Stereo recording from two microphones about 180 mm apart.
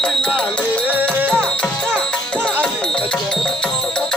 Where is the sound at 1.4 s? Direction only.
5° left (ahead or behind).